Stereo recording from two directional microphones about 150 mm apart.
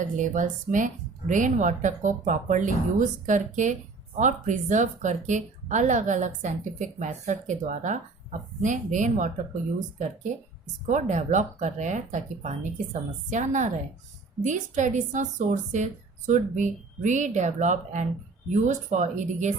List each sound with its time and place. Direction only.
0.0 s a woman's voice: 60° right (ahead or behind)
10.8 s a woman's voice: 55° right (ahead or behind)